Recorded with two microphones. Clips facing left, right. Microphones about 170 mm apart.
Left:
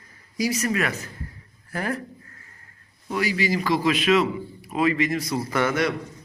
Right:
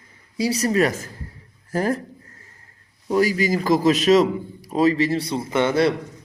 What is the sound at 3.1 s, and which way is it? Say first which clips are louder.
Speech: right 5 dB; 45° right (ahead or behind).